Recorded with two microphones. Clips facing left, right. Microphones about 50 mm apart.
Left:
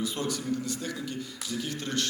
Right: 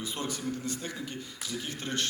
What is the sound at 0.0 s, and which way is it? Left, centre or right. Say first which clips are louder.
A man's voice: left 3 dB; right.